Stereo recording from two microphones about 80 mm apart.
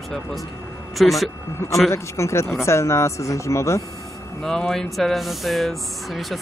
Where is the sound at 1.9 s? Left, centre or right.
Left.